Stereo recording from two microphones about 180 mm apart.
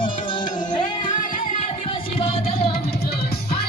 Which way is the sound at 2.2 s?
30° left (ahead or behind).